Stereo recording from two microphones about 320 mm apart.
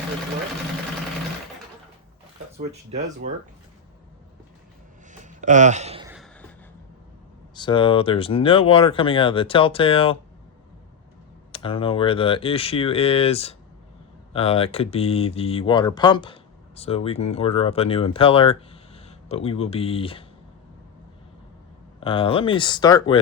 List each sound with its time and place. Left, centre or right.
2.6 s speech: right
5.1 s a sound: right
6.1 s a sound: centre
7.5 s speech: centre
11.5 s speech: centre
22.0 s speech: centre